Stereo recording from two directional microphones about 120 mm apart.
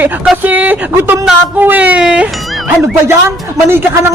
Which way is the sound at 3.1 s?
20° right (ahead or behind).